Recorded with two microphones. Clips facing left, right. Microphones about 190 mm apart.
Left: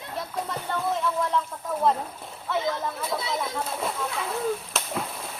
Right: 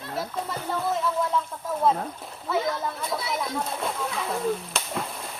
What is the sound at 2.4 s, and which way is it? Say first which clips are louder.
Speech: right 1 dB; centre (ahead or behind).